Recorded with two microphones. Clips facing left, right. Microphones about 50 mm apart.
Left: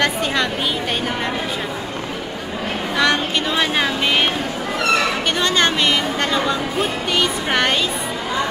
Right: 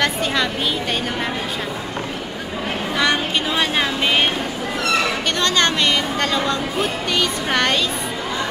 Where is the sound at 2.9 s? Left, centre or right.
Centre.